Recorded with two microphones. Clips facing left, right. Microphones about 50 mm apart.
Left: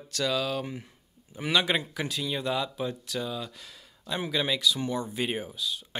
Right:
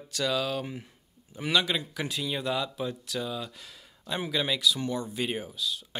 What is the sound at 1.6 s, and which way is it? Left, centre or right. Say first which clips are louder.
Speech: left 3 dB; left.